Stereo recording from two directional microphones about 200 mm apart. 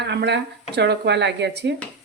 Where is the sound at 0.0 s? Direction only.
60° right (ahead or behind).